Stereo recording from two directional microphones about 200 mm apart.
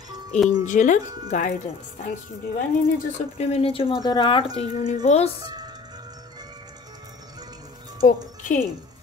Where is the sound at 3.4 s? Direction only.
30° left (ahead or behind).